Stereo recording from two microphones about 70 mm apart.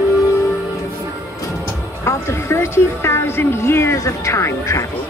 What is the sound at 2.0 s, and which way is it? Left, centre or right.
Speech, left.